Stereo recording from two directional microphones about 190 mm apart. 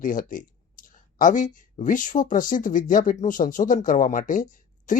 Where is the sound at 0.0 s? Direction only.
45° left (ahead or behind).